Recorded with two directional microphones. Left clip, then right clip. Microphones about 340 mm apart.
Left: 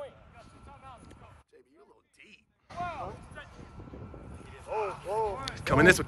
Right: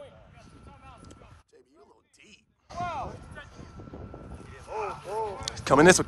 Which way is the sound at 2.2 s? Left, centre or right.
Centre.